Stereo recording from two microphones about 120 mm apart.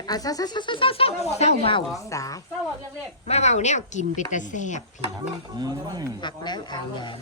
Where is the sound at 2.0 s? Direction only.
30° left (ahead or behind).